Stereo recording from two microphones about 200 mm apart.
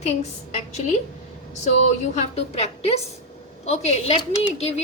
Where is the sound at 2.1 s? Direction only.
30° left (ahead or behind).